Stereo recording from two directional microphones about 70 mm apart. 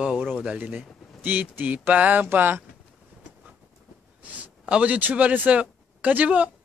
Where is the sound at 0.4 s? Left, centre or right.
Centre.